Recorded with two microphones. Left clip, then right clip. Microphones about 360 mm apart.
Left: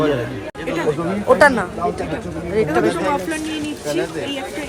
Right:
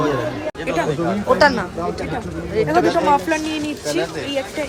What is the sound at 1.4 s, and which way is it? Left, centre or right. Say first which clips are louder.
Speech: left 2 dB; left.